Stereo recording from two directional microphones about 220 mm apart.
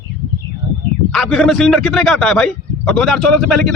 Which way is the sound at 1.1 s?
Centre (ahead or behind).